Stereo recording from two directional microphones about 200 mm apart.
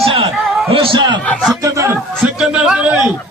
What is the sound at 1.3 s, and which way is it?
Chuckle, 5° right (ahead or behind).